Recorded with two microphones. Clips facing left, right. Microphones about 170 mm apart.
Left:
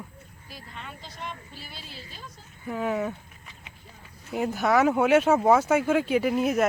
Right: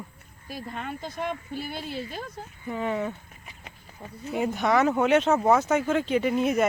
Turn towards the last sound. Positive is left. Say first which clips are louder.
# even
turn(degrees=0)  # may be behind; listen again after turning